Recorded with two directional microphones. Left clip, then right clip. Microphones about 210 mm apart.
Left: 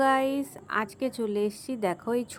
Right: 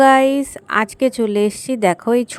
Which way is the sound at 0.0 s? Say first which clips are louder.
Right 13 dB; 35° right (ahead or behind).